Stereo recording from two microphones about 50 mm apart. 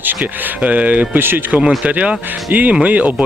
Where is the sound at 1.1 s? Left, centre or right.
Right.